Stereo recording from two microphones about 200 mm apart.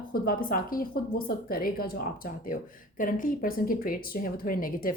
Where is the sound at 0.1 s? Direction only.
45° left (ahead or behind).